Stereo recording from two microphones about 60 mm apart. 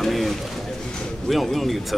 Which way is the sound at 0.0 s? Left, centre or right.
Centre.